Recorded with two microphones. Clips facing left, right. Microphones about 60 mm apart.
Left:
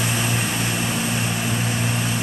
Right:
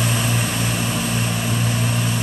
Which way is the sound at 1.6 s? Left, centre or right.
Centre.